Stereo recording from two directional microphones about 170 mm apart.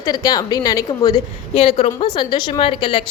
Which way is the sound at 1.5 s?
30° left (ahead or behind).